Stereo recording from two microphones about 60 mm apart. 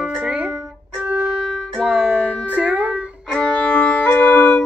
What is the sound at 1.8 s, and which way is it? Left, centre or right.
Music, centre.